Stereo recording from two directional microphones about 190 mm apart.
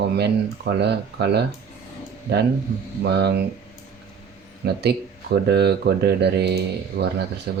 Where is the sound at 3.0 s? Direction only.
60° right (ahead or behind).